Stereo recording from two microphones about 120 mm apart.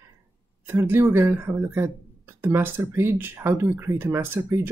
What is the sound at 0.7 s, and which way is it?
Speech, 20° right (ahead or behind).